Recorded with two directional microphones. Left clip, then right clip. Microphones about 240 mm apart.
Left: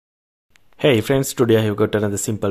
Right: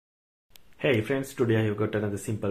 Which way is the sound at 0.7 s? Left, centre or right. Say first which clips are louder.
Left 9 dB; left.